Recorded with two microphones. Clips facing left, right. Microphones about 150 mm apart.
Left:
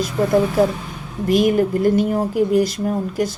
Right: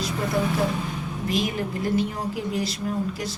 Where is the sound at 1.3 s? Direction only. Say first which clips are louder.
Left 11 dB; 50° left (ahead or behind).